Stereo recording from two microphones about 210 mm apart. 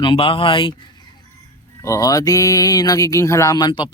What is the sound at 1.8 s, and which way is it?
Speech, 15° left (ahead or behind).